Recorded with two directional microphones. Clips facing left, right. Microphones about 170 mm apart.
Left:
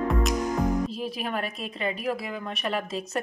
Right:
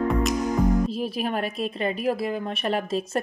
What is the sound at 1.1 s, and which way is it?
A woman's voice, 35° right (ahead or behind).